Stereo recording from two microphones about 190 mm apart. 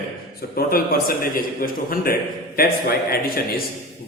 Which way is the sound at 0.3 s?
50° left (ahead or behind).